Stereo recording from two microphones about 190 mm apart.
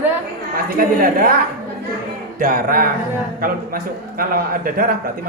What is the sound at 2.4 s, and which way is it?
A man's voice, 50° right (ahead or behind).